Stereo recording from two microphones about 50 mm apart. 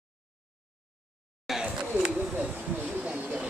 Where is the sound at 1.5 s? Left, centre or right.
Centre.